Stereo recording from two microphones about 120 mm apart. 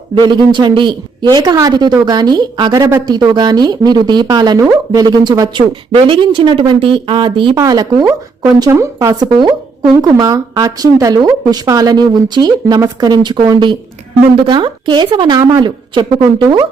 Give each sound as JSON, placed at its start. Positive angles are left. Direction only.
{"t": 0.1, "sound": "speech", "side_deg": -40}
{"t": 7.5, "sound": "speech", "side_deg": -30}